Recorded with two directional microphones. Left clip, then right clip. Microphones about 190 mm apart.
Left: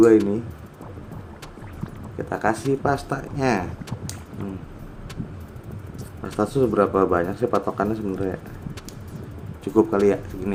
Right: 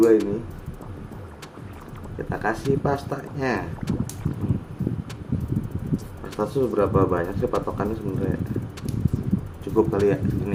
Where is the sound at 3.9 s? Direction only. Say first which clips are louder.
Right 8 dB; centre (ahead or behind).